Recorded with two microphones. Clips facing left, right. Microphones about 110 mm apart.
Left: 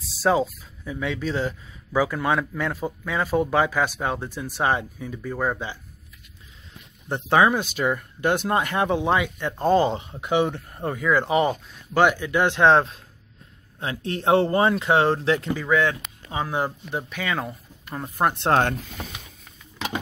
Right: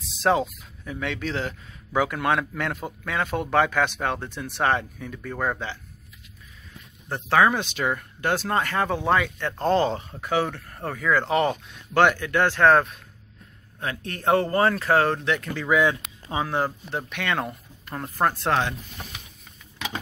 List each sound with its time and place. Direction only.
0.2 s speech: 5° left (ahead or behind)
7.1 s speech: 20° left (ahead or behind)
7.4 s speech: 5° left (ahead or behind); by 15.5 s 30° left (ahead or behind)
15.6 s speech: 10° right (ahead or behind)
16.4 s speech: 10° left (ahead or behind)
18.1 s speech: 20° left (ahead or behind)